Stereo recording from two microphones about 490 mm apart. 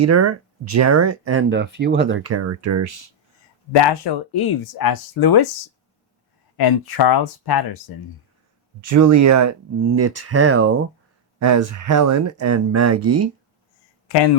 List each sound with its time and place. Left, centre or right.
0.0 s speech: right
3.7 s speech: left
6.6 s speech: left
8.8 s speech: right